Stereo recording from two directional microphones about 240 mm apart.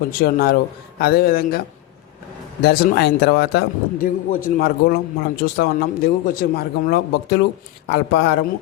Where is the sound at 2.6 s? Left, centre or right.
Left.